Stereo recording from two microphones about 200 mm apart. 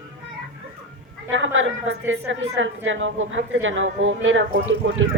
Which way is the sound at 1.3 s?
75° right (ahead or behind).